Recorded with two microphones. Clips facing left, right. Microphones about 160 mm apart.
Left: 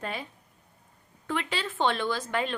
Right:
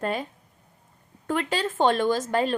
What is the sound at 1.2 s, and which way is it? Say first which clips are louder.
Speech: right 5 dB; 45° right (ahead or behind).